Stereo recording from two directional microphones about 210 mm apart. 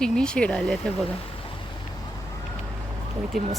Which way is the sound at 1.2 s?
25° left (ahead or behind).